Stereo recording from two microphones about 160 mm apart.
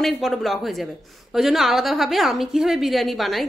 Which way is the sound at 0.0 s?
Centre (ahead or behind).